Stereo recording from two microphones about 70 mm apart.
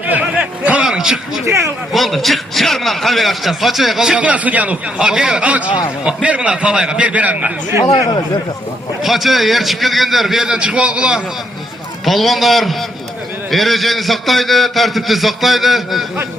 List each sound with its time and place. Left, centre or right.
0.0 s a sound: right; by 1.4 s centre
1.5 s speech: right
1.9 s a man's voice: centre; by 4.8 s right
4.9 s a man's voice: centre
9.0 s a man's voice: centre
12.0 s a man's voice: centre